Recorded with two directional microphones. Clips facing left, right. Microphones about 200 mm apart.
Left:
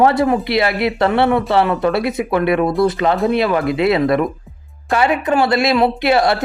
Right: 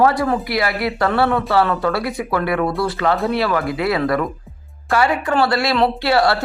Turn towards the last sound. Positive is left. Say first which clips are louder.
# left 2 dB
turn(degrees=20)  # may be behind; listen again after turning